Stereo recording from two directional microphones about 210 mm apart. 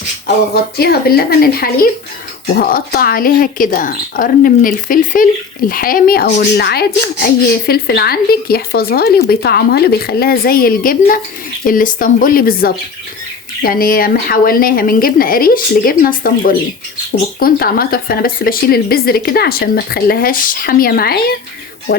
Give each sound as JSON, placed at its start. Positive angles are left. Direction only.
{"t": 0.5, "sound": "speech", "side_deg": 50}